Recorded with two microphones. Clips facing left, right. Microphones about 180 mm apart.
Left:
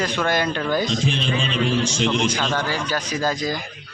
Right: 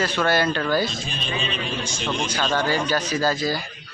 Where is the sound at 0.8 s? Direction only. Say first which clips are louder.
Left 8 dB; 90° left.